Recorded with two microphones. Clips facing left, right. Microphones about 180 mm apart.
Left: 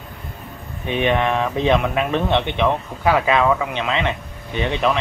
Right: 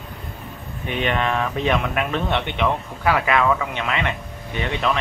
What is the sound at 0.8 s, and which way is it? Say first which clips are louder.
Speech: left 4 dB; 20° left (ahead or behind).